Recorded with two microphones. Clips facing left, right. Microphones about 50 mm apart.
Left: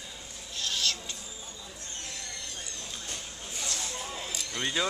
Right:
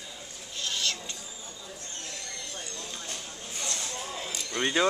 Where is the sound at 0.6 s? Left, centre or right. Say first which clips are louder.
Even; centre.